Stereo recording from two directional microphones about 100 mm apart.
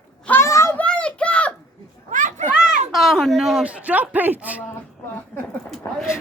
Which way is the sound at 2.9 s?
Centre (ahead or behind).